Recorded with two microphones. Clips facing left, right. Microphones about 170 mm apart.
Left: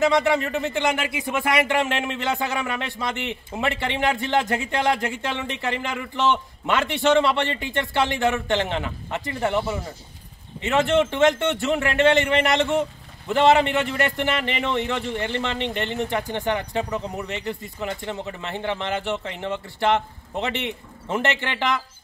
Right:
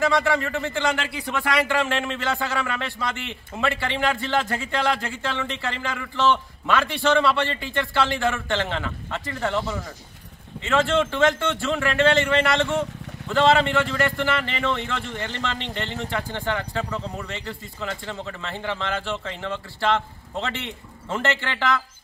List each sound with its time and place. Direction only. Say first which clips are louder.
0.0 s a man's voice: left 2 dB; 20° left (ahead or behind)